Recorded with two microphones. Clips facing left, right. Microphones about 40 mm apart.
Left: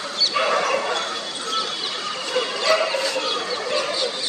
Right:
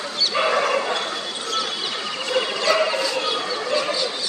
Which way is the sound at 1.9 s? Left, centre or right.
Centre.